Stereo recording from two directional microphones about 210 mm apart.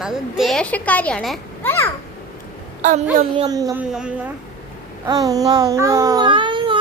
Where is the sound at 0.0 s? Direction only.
Centre (ahead or behind).